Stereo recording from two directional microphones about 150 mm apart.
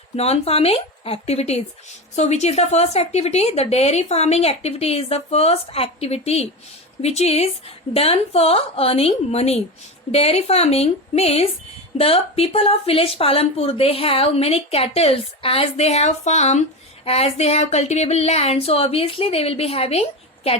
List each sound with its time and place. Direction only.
0.2 s speech: 45° left (ahead or behind)